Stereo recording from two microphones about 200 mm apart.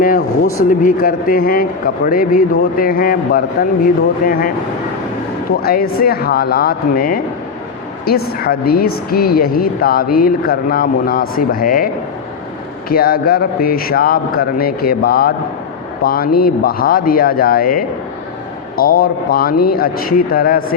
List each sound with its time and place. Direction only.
0.0 s speech: 45° left (ahead or behind)
12.9 s speech: 50° left (ahead or behind)